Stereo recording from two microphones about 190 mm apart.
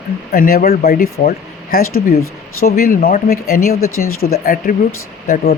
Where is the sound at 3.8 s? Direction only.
90° left.